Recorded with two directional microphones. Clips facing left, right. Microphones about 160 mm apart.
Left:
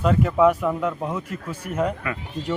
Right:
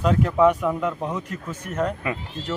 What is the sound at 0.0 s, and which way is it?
Speech, centre (ahead or behind).